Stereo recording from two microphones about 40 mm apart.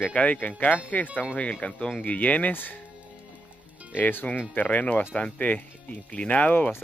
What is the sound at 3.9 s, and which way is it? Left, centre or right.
Speech, left.